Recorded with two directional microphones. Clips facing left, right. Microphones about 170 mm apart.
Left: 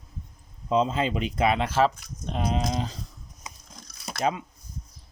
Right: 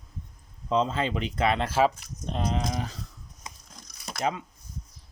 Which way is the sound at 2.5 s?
20° left (ahead or behind).